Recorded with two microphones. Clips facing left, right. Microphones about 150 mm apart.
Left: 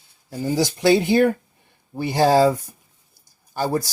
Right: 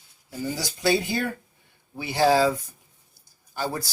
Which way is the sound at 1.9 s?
45° left (ahead or behind).